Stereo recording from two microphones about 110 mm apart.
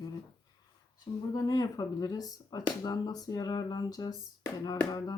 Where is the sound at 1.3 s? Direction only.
35° left (ahead or behind).